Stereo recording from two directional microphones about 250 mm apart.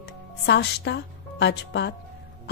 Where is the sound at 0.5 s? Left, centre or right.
Left.